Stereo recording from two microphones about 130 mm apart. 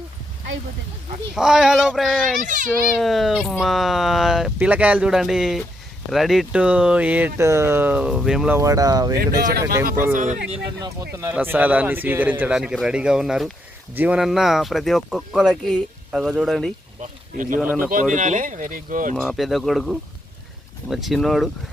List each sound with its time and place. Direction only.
1.4 s speech: 5° right (ahead or behind)
2.4 s a child's voice: 85° right
3.0 s speech: centre (ahead or behind)
8.5 s speech: 25° right (ahead or behind)
10.2 s speech: 70° right (ahead or behind)
10.8 s speech: 25° right (ahead or behind)
12.5 s speech: 5° right (ahead or behind)
14.2 s speech: 5° right (ahead or behind)
17.0 s speech: 90° right
17.6 s speech: 10° right (ahead or behind)
18.1 s speech: 75° right (ahead or behind)
19.1 s speech: centre (ahead or behind)